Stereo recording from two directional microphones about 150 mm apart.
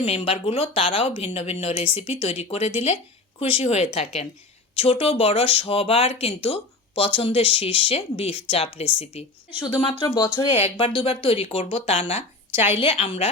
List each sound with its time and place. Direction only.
0.0 s speech: 40° left (ahead or behind); by 10.5 s 20° left (ahead or behind)
10.6 s speech: 35° left (ahead or behind)